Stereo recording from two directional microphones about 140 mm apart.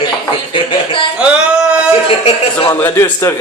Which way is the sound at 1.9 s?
40° left (ahead or behind).